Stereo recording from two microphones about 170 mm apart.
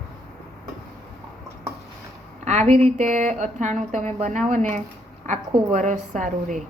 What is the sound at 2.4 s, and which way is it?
A woman's voice, 40° right (ahead or behind).